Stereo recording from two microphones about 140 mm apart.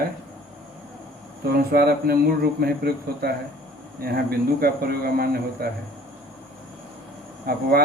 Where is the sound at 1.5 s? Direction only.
90° right.